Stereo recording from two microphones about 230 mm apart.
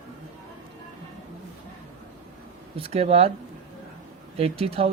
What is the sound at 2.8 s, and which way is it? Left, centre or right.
Speech, right.